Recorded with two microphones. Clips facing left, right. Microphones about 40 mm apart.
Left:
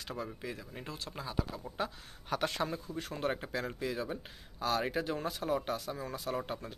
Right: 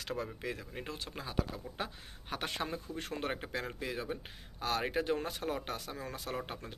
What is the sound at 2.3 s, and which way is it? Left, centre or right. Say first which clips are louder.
Speech: left 4 dB; right.